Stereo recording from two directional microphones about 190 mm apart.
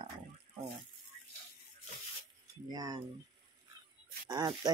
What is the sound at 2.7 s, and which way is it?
Speech, 20° right (ahead or behind).